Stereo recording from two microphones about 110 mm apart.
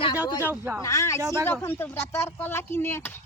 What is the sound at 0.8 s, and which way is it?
Speech, 30° left (ahead or behind).